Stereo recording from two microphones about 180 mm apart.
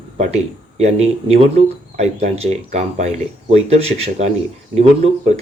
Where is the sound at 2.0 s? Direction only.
35° right (ahead or behind).